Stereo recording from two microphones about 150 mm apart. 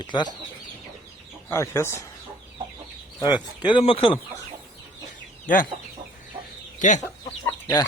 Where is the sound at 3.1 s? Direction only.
30° left (ahead or behind).